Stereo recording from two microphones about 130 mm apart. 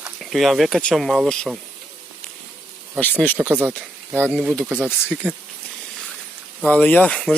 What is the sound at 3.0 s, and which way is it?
Speech, 15° left (ahead or behind).